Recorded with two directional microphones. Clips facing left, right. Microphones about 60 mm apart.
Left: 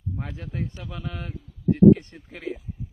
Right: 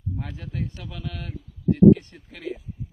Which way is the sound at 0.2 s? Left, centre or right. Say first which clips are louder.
Left 1 dB; left.